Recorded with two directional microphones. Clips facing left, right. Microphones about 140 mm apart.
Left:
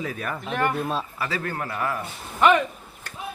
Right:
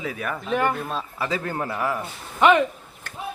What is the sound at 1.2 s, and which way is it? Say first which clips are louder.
Speech: right 2 dB; 20° right (ahead or behind).